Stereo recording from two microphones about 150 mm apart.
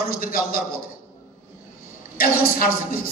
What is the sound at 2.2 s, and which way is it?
Speech, 75° left (ahead or behind).